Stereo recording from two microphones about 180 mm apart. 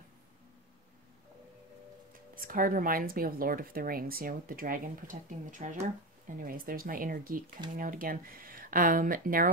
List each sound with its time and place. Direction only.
2.3 s speech: 50° right (ahead or behind)